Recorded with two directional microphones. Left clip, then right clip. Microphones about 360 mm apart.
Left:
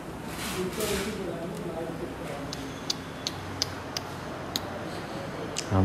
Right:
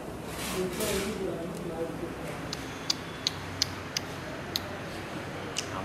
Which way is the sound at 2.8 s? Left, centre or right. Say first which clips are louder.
Right 3 dB; centre.